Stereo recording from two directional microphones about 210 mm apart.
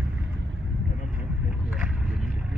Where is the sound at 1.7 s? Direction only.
5° right (ahead or behind).